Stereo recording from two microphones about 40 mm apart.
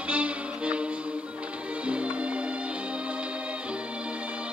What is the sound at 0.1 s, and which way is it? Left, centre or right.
Music, right.